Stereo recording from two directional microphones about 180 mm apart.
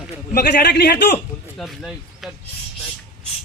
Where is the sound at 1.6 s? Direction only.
Centre (ahead or behind).